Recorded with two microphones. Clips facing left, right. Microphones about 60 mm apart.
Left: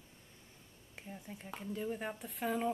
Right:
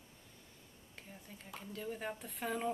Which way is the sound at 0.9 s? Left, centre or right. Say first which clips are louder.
Left 6 dB; centre.